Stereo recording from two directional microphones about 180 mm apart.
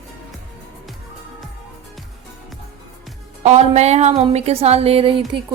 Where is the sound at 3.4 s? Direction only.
40° right (ahead or behind).